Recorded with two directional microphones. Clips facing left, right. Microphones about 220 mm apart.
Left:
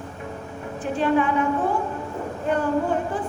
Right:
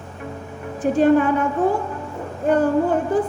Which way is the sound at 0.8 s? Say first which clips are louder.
Right 8 dB; 45° right (ahead or behind).